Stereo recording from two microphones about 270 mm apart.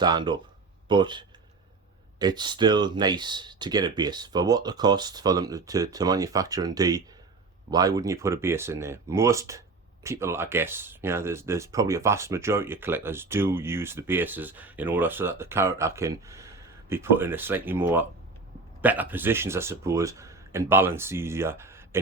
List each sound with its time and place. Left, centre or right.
0.0 s speech: centre